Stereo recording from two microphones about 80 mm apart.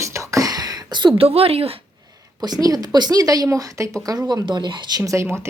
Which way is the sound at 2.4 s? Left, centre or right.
Right.